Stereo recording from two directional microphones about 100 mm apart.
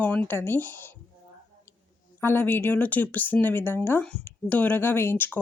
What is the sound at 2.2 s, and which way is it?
Speech, 20° left (ahead or behind).